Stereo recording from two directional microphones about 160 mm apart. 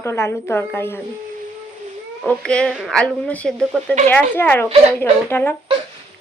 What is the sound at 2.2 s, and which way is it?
A woman's voice, 5° left (ahead or behind).